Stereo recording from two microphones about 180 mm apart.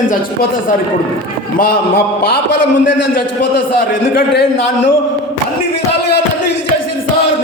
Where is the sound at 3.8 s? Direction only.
55° left (ahead or behind).